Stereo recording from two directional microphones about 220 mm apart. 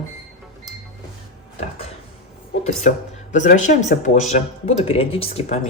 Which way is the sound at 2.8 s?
35° left (ahead or behind).